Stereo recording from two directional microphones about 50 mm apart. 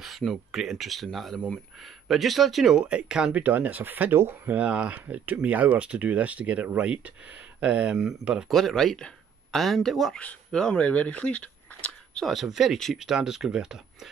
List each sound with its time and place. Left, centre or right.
0.5 s speech: centre
2.8 s speech: right
3.3 s speech: right
4.6 s speech: right
7.6 s speech: right
7.9 s speech: centre
8.5 s speech: centre
10.1 s speech: centre
10.8 s speech: left
12.3 s speech: centre